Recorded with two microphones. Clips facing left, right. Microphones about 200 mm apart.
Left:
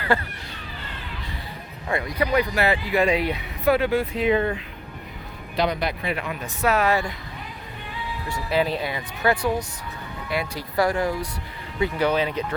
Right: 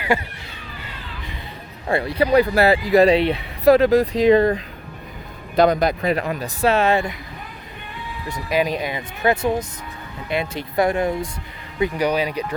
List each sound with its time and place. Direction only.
0.0 s speech: 15° right (ahead or behind)
1.9 s speech: 30° right (ahead or behind)
8.3 s speech: 15° right (ahead or behind)